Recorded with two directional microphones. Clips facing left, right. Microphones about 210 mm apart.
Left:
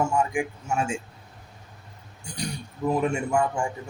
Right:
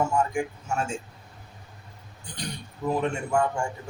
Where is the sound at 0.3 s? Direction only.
15° left (ahead or behind).